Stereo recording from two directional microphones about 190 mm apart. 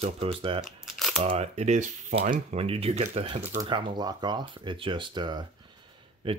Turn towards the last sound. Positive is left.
turn(degrees=-30)  # may be behind; listen again after turning